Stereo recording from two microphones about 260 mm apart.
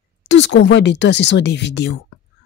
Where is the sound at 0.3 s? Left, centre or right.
Left.